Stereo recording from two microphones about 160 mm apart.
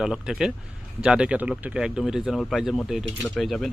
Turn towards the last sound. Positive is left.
turn(degrees=0)  # may be behind; listen again after turning